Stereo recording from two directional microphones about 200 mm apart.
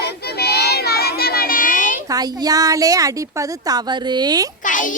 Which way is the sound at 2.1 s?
20° right (ahead or behind).